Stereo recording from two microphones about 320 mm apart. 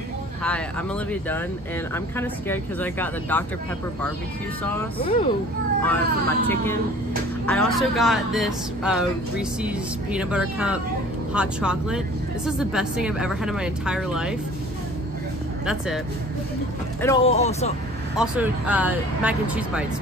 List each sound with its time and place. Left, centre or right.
2.1 s speech: centre
4.6 s speech: centre
5.8 s speech: centre
15.6 s speech: centre
17.0 s speech: centre
18.1 s speech: centre